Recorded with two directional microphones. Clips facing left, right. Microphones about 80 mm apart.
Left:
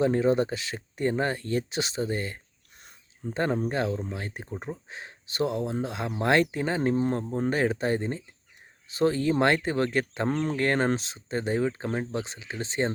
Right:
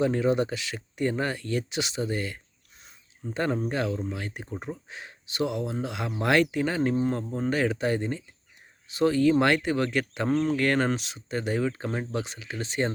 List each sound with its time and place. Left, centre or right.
0.0 s speech: left
3.5 s speech: left
10.2 s speech: centre
10.6 s speech: left